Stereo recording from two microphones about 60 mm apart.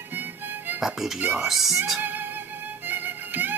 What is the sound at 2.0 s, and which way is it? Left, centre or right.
Music, right.